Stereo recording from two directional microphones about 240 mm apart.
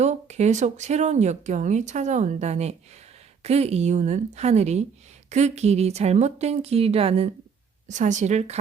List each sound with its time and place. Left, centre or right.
0.0 s speech: right